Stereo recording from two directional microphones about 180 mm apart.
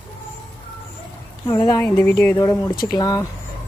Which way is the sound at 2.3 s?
15° left (ahead or behind).